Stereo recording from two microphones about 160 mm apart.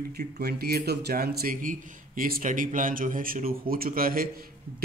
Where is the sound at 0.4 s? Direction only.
75° right (ahead or behind).